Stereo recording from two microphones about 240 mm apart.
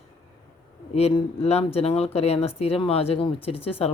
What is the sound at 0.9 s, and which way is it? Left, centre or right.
Speech, left.